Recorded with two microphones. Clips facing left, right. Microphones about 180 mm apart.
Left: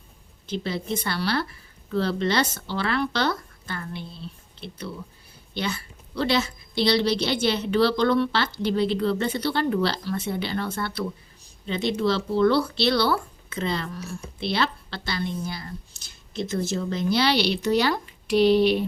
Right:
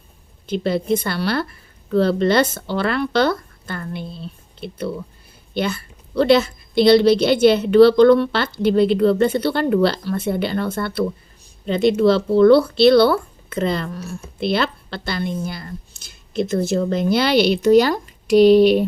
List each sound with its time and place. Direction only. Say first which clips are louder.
0.4 s a woman's voice: right 8 dB; 55° right (ahead or behind)
5.5 s a woman's voice: right 7 dB; 55° right (ahead or behind)
15.0 s a woman's voice: right 5 dB; 55° right (ahead or behind)